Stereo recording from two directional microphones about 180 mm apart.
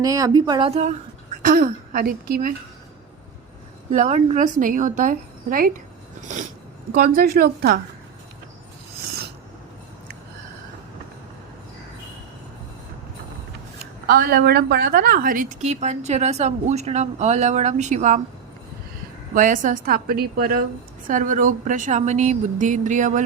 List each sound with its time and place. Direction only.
0.0 s speech: 20° right (ahead or behind); by 0.9 s 35° right (ahead or behind)
1.4 s a woman's voice: 50° right (ahead or behind)
3.9 s a woman's voice: 40° right (ahead or behind)
6.9 s a woman's voice: 55° right (ahead or behind)
13.7 s a woman's voice: 65° right (ahead or behind); by 18.2 s 45° right (ahead or behind)
19.3 s a woman's voice: 45° right (ahead or behind)